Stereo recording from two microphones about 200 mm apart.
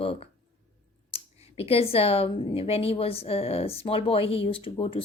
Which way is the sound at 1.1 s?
30° left (ahead or behind).